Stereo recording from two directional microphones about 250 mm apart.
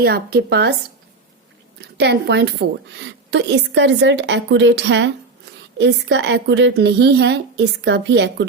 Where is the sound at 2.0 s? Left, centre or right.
Right.